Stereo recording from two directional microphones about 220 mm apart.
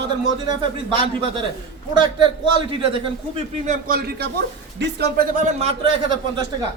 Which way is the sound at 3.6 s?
40° right (ahead or behind).